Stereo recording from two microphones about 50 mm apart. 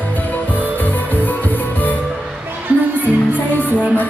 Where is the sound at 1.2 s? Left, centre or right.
Left.